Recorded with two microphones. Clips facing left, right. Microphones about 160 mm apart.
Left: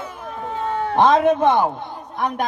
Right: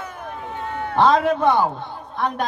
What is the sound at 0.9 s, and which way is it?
A man's voice, 20° left (ahead or behind).